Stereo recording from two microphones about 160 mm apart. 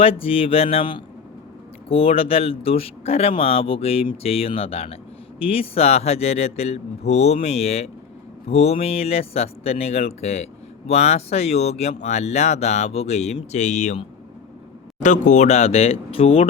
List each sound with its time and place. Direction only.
0.0 s speech: 35° left (ahead or behind)